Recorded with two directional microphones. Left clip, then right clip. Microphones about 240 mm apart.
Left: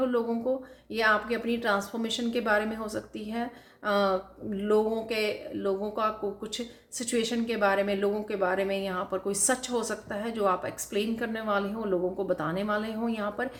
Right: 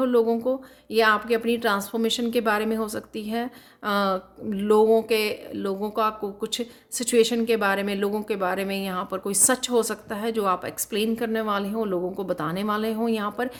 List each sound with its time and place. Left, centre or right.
0.0 s speech: right